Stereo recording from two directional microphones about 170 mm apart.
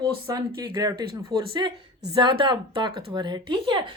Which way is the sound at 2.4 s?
30° right (ahead or behind).